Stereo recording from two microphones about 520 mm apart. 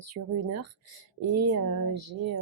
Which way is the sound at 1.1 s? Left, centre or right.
Right.